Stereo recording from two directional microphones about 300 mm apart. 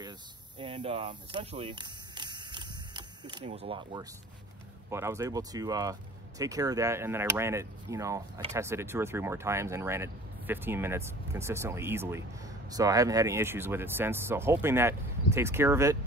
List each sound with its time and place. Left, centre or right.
0.6 s speech: centre